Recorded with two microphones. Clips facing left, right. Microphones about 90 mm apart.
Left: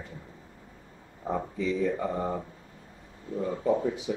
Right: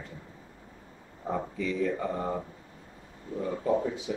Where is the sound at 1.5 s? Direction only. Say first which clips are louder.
Left 2 dB; 20° left (ahead or behind).